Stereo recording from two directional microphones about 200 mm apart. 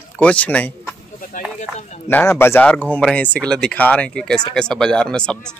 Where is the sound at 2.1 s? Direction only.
10° left (ahead or behind).